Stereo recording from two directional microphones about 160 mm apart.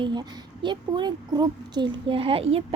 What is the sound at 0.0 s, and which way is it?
A woman's voice, 30° right (ahead or behind).